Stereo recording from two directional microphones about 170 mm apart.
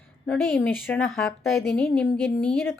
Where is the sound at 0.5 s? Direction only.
10° left (ahead or behind).